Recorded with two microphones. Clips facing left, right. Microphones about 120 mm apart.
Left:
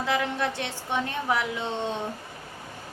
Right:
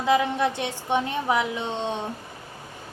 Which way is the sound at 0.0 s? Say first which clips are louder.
Right 5 dB; 15° right (ahead or behind).